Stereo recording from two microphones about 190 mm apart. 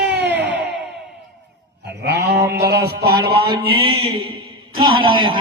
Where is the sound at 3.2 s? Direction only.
25° right (ahead or behind).